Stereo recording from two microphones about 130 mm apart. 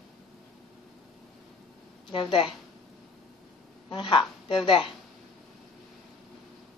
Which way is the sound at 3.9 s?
40° left (ahead or behind).